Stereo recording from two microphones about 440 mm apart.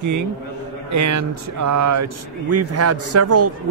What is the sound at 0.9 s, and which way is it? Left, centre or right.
A man's voice, right.